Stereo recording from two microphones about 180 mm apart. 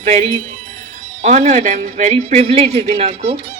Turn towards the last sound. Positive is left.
turn(degrees=-35)  # may be behind; listen again after turning